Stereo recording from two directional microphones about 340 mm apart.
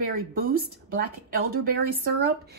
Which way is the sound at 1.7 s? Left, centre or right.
Right.